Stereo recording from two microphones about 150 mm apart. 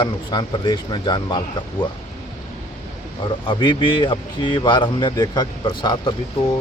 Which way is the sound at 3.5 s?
35° left (ahead or behind).